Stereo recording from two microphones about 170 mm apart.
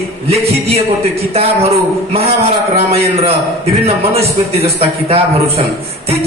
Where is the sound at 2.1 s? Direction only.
35° right (ahead or behind).